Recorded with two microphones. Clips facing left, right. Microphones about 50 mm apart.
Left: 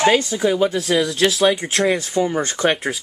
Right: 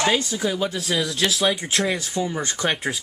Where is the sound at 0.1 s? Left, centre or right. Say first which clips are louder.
Left 6 dB; left.